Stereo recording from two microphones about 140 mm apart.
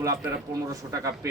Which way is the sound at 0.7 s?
25° right (ahead or behind).